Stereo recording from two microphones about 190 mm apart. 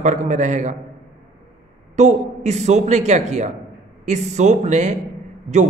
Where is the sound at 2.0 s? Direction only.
35° right (ahead or behind).